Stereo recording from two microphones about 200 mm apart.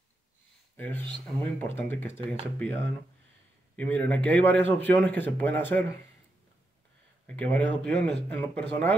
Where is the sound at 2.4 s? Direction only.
10° left (ahead or behind).